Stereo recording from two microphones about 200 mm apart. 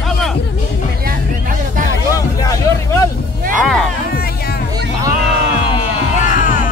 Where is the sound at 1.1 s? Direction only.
45° right (ahead or behind).